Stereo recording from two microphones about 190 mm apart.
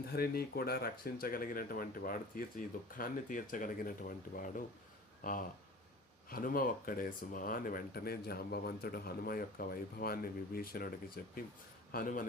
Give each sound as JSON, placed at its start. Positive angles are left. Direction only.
{"t": 0.1, "sound": "a man's voice", "side_deg": 55}